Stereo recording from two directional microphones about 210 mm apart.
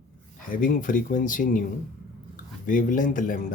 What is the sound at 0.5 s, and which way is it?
Speech, 40° left (ahead or behind).